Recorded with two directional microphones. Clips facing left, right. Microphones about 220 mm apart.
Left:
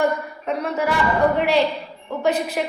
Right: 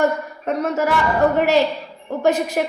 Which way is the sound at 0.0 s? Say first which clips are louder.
Right 2 dB; 45° right (ahead or behind).